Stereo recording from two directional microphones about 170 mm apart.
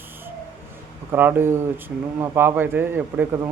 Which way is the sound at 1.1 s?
10° right (ahead or behind).